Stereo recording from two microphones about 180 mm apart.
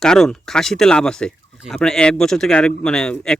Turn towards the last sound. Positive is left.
turn(degrees=5)  # may be behind; listen again after turning